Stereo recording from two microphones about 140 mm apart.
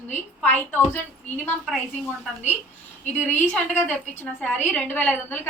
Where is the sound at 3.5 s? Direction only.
10° left (ahead or behind).